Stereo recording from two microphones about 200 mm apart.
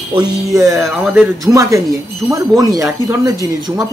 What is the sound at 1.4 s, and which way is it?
Speech, 15° right (ahead or behind).